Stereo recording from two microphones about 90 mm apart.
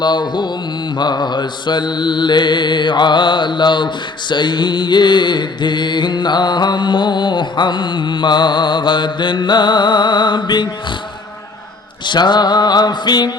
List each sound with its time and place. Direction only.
0.0 s mantra: 55° left (ahead or behind)
12.0 s mantra: 55° left (ahead or behind)